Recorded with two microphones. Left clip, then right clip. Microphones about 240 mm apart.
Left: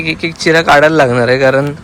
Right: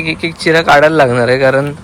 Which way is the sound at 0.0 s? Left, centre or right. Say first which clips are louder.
Left 1 dB; centre.